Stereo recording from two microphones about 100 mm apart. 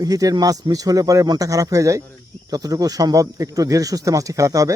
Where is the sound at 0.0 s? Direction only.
40° right (ahead or behind).